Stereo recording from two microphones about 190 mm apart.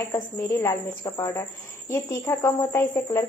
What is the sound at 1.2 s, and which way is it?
Speech, 20° left (ahead or behind).